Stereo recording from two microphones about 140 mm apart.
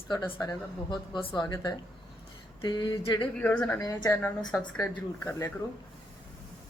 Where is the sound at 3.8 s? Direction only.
25° left (ahead or behind).